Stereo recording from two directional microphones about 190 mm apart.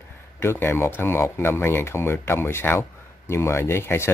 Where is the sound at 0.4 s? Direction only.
10° left (ahead or behind).